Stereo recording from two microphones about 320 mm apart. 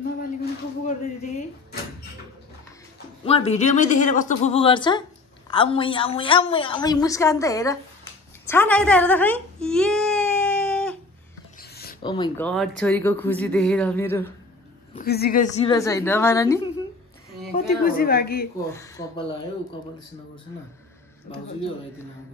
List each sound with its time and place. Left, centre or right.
0.2 s a sound: left
3.3 s a woman's voice: centre
8.5 s baby cry: centre
11.7 s rub: left
12.0 s speech: centre
15.0 s a woman's voice: left; by 16.6 s centre
17.5 s a sound: centre
17.8 s speech: left
18.7 s a woman's voice: centre